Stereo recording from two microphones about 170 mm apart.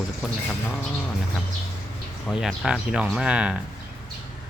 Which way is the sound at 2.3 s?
Centre (ahead or behind).